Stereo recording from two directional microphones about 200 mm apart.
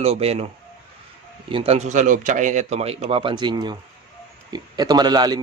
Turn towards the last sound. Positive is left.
turn(degrees=-20)  # may be behind; listen again after turning